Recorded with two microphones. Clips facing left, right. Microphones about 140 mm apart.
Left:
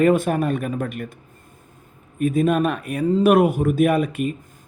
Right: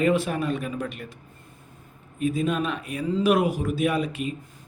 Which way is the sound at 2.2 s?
55° left (ahead or behind).